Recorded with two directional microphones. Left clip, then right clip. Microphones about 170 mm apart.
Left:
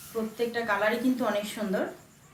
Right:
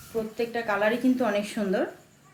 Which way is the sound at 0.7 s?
50° right (ahead or behind).